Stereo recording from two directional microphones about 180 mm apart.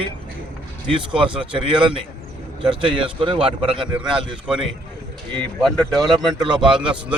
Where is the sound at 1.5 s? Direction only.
30° right (ahead or behind).